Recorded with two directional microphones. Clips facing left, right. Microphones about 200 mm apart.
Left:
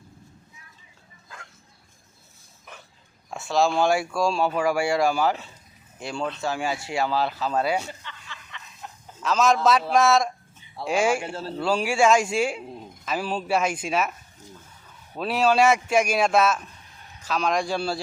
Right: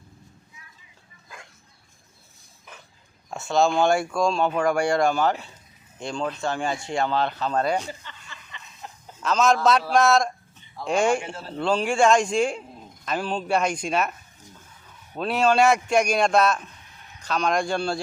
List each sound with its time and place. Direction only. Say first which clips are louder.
3.2 s speech: right 1 dB; centre (ahead or behind)
11.2 s speech: left 4 dB; 40° left (ahead or behind)
11.5 s speech: right 1 dB; 5° left (ahead or behind)
15.1 s speech: even; centre (ahead or behind)